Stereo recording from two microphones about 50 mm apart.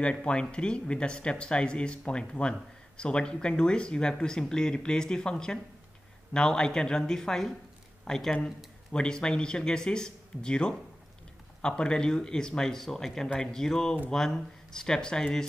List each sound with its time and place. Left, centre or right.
0.0 s speech: left